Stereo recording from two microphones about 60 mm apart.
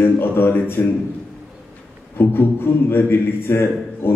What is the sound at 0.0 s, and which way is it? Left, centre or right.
Speech, left.